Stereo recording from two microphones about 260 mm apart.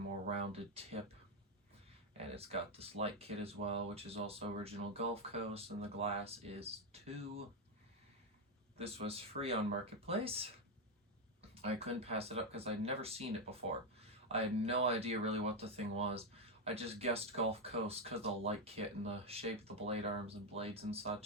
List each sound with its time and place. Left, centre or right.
0.3 s speech: right
2.1 s speech: right
8.8 s speech: right
11.5 s speech: right